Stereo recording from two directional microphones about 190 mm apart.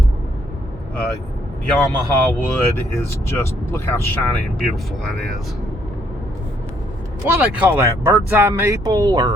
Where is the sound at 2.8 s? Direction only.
15° left (ahead or behind).